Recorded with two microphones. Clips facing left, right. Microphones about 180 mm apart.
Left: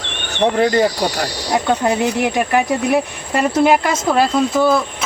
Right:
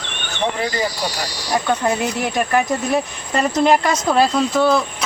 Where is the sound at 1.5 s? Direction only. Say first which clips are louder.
Left 2 dB; 20° left (ahead or behind).